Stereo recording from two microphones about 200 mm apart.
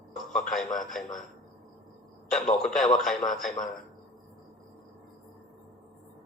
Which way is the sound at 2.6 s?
Centre (ahead or behind).